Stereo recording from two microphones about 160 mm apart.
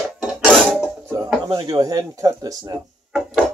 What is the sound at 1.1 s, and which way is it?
Speech, 25° right (ahead or behind).